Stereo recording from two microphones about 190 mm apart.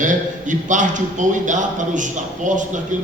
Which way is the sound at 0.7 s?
40° right (ahead or behind).